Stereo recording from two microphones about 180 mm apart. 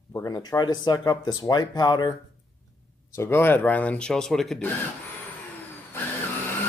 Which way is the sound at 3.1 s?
15° left (ahead or behind).